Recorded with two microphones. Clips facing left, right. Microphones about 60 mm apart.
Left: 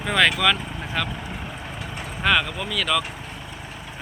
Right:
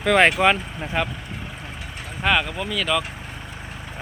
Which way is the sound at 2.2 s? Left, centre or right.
Centre.